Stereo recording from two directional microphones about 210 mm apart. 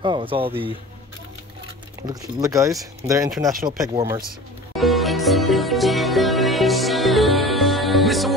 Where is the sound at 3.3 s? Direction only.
Centre (ahead or behind).